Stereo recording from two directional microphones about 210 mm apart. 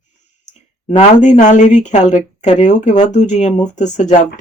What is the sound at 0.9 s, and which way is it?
Speech, 35° left (ahead or behind).